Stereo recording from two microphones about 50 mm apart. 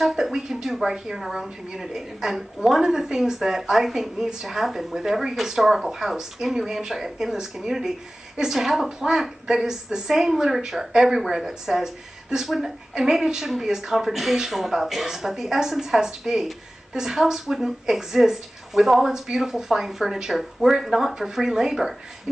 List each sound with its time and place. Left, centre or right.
0.0 s a woman's voice: centre